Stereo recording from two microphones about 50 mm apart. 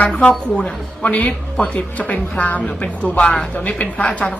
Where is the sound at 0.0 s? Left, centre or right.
Left.